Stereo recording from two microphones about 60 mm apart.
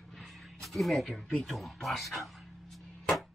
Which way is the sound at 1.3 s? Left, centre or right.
Centre.